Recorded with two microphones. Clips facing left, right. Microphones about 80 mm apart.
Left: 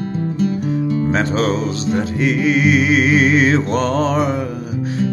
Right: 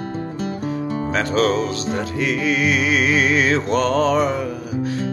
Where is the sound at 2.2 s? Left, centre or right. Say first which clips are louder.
Left 4 dB; left.